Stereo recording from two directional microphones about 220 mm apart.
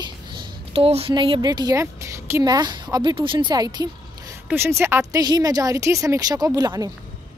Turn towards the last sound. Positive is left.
turn(degrees=-20)  # may be behind; listen again after turning